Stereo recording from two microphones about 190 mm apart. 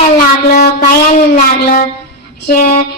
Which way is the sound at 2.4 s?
55° left (ahead or behind).